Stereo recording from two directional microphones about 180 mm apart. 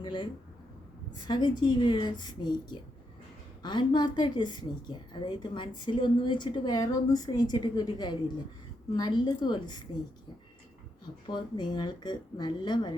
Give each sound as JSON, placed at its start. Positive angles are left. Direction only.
{"t": 0.0, "sound": "speech", "side_deg": 25}
{"t": 1.3, "sound": "a woman's voice", "side_deg": 25}
{"t": 11.3, "sound": "a woman's voice", "side_deg": 25}